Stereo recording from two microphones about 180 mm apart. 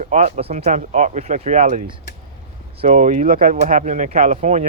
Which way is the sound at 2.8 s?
45° right (ahead or behind).